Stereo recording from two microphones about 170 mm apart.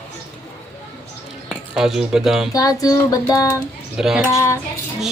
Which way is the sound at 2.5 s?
20° left (ahead or behind).